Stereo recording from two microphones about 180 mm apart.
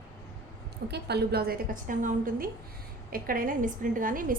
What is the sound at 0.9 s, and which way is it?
A woman's voice, 65° right (ahead or behind).